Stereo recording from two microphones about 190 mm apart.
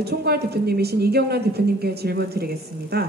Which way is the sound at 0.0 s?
60° right (ahead or behind).